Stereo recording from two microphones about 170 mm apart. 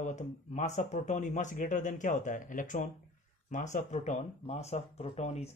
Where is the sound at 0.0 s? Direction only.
45° left (ahead or behind).